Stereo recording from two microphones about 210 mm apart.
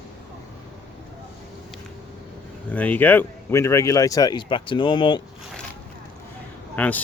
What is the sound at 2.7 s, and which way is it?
Speech, 10° left (ahead or behind).